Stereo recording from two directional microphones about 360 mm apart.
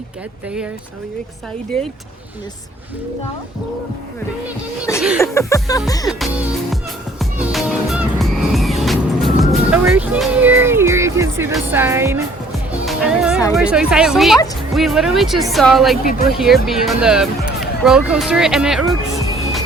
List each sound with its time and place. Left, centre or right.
4.9 s a woman's voice: centre
5.2 s music: centre
13.6 s a woman's voice: centre
17.6 s music: centre